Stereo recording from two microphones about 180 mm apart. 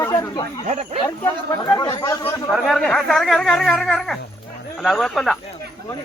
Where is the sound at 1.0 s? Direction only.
10° left (ahead or behind).